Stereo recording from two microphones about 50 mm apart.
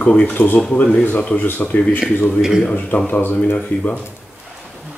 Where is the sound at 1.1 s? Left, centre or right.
Left.